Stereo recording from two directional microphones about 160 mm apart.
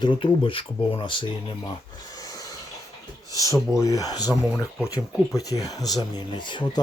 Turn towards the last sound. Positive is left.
turn(degrees=30)  # may be behind; listen again after turning